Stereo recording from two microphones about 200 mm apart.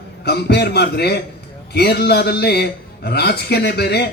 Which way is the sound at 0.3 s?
55° left (ahead or behind).